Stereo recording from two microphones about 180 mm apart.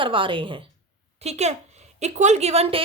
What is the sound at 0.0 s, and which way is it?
A woman's voice, 30° right (ahead or behind).